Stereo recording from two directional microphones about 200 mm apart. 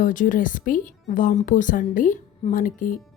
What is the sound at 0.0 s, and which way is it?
A woman's voice, 40° left (ahead or behind).